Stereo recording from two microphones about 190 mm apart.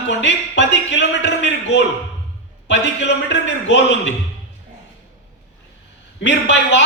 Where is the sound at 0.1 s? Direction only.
70° left (ahead or behind).